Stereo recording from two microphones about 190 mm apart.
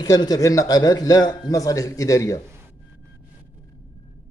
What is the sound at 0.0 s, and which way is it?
A man's voice, 20° left (ahead or behind).